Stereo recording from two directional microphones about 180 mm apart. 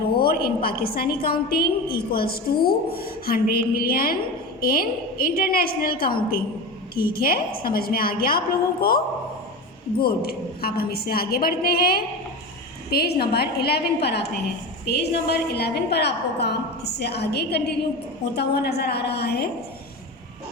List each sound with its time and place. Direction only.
0.2 s a woman's voice: 60° left (ahead or behind)
10.0 s a woman's voice: 60° left (ahead or behind)